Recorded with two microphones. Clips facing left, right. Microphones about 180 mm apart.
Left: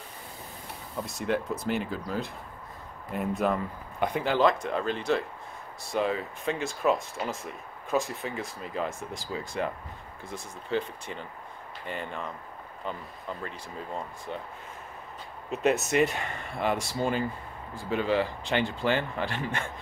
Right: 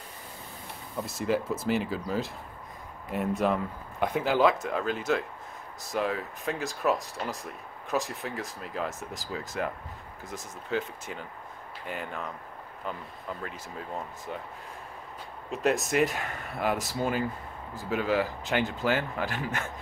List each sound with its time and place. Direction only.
0.9 s speech: centre (ahead or behind)
13.3 s speech: 5° right (ahead or behind)
15.5 s speech: centre (ahead or behind)